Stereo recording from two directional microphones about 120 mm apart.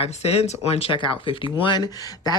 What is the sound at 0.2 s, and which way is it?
Speech, 60° left (ahead or behind).